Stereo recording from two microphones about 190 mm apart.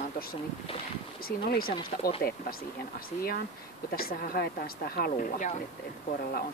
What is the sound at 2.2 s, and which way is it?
Speech, 50° left (ahead or behind).